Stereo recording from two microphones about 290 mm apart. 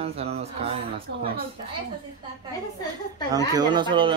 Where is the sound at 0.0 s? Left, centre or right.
Right.